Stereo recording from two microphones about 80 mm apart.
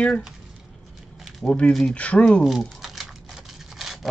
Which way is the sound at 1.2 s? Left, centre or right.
Centre.